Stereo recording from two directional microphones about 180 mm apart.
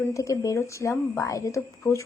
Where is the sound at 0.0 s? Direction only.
15° left (ahead or behind).